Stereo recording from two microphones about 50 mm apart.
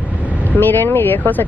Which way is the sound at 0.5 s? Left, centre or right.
Left.